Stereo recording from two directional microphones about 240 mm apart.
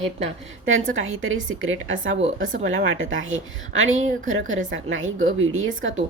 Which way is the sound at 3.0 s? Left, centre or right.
Right.